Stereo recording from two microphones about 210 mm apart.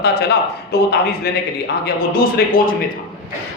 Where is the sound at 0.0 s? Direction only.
50° left (ahead or behind).